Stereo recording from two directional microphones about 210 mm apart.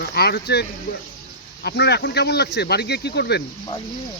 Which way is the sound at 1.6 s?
55° left (ahead or behind).